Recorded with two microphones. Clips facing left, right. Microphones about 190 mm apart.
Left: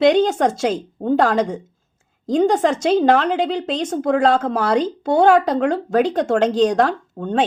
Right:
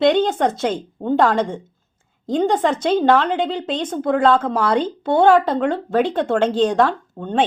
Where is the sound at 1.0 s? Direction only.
40° left (ahead or behind).